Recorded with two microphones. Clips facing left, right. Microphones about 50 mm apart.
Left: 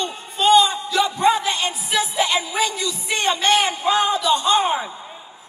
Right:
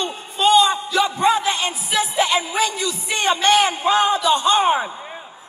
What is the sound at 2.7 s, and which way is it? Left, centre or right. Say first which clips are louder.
Speech: right 1 dB; right.